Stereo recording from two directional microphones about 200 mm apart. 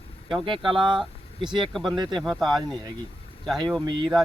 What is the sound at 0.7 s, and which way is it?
Speech, 25° right (ahead or behind).